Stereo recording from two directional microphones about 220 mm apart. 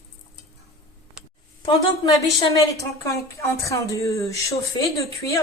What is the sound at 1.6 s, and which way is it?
Speech, 15° left (ahead or behind).